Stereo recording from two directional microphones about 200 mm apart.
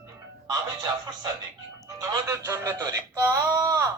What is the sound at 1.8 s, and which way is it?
Speech, 15° right (ahead or behind).